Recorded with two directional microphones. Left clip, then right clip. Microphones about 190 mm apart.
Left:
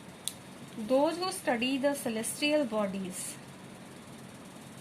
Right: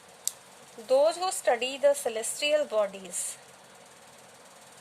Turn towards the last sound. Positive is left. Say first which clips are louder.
# right 5 dB
turn(degrees=-60)  # may be behind; listen again after turning